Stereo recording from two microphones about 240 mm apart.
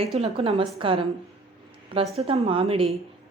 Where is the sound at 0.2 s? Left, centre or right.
Right.